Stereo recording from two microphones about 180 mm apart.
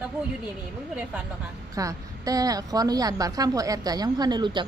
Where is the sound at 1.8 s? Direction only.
20° right (ahead or behind).